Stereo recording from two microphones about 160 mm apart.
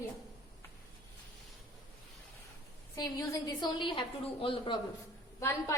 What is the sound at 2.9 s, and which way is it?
A woman's voice, 25° left (ahead or behind).